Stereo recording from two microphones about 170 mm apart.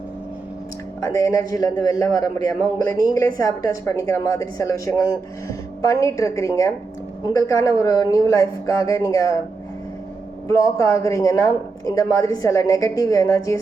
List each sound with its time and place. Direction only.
1.0 s a man's voice: 20° left (ahead or behind)
10.5 s a man's voice: 15° left (ahead or behind)